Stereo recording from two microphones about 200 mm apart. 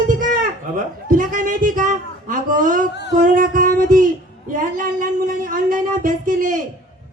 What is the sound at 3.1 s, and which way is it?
Music, 40° right (ahead or behind).